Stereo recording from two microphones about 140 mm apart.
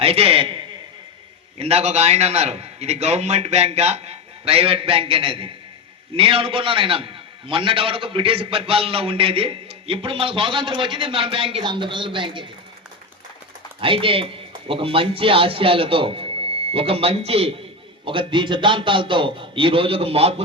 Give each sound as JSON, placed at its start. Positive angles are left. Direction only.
{"t": 0.0, "sound": "a man's voice", "side_deg": -45}
{"t": 13.8, "sound": "a man's voice", "side_deg": -40}